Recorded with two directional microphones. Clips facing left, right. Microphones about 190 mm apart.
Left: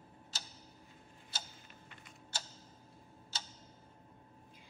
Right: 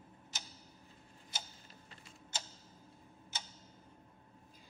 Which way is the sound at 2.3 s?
20° right (ahead or behind).